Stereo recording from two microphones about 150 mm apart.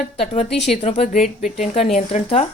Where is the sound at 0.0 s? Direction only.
50° left (ahead or behind).